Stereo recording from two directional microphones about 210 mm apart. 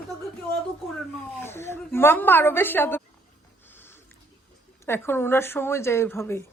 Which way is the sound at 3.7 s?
10° left (ahead or behind).